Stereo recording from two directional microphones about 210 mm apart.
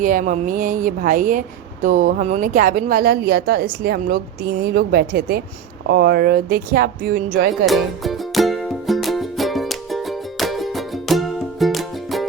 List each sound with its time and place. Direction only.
0.0 s speech: 40° right (ahead or behind)
7.5 s music: centre (ahead or behind)